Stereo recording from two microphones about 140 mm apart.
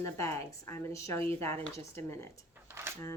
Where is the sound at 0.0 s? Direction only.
20° left (ahead or behind).